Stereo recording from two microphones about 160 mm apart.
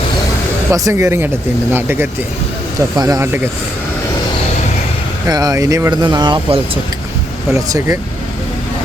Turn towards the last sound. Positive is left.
turn(degrees=-20)  # may be behind; listen again after turning